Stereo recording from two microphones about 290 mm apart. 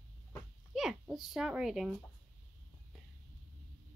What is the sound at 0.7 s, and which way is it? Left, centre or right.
A child's voice, centre.